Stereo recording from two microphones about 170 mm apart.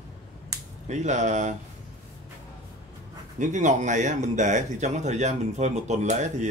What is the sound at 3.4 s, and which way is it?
Speech, 45° right (ahead or behind).